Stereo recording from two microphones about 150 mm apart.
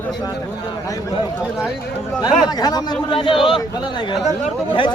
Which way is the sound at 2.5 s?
25° left (ahead or behind).